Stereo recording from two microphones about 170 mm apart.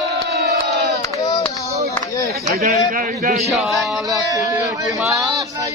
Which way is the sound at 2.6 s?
45° right (ahead or behind).